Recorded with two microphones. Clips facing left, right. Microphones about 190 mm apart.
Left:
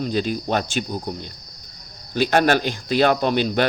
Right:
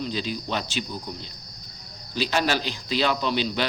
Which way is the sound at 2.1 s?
55° left (ahead or behind).